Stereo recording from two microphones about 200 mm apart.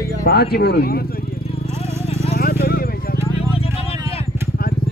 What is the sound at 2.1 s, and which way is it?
Horse, 30° left (ahead or behind).